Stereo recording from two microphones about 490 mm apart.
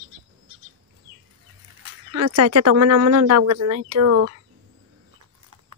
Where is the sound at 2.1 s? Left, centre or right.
Right.